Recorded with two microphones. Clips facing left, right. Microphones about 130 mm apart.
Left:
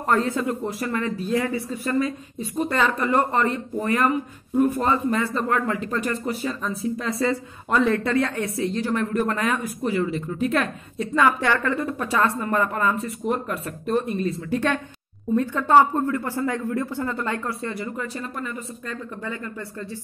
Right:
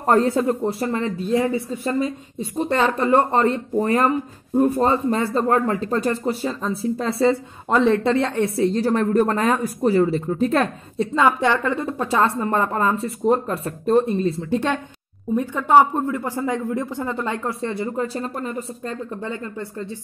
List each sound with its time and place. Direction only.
0.0 s speech: 35° right (ahead or behind)